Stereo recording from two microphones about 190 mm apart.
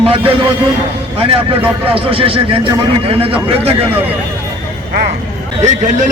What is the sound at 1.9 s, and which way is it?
A man's voice, 30° right (ahead or behind).